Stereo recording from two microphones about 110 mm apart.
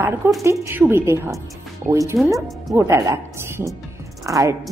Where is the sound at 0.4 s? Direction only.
25° right (ahead or behind).